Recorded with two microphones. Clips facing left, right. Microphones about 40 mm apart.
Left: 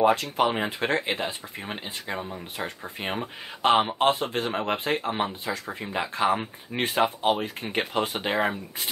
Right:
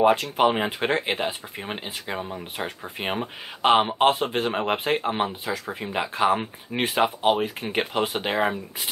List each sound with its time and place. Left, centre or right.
0.0 s speech: centre
5.4 s speech: centre